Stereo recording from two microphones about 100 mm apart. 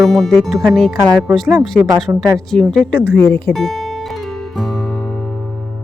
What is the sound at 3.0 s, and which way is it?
Speech, 15° left (ahead or behind).